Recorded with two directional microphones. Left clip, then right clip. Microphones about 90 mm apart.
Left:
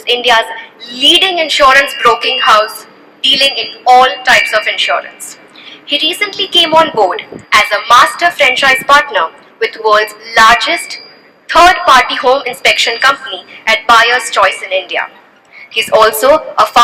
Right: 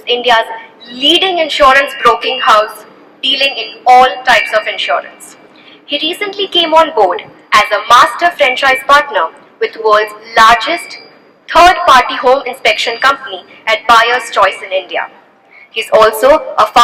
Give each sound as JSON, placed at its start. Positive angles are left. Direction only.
{"t": 0.0, "sound": "a woman's voice", "side_deg": 25}